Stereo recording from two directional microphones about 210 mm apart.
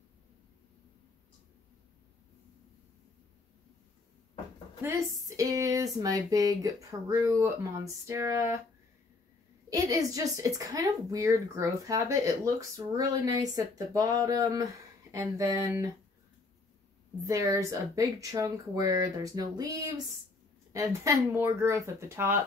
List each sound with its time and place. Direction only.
4.8 s a woman's voice: 15° right (ahead or behind)
9.7 s a woman's voice: 15° right (ahead or behind)
17.3 s a woman's voice: 15° right (ahead or behind)